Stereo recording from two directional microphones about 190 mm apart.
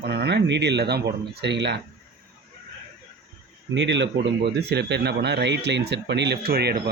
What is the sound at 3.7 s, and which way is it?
Speech, 70° right (ahead or behind).